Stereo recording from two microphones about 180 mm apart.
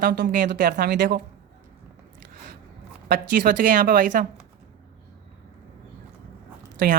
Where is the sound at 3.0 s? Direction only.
50° right (ahead or behind).